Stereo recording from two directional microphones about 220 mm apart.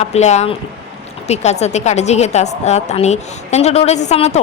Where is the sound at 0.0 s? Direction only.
30° left (ahead or behind).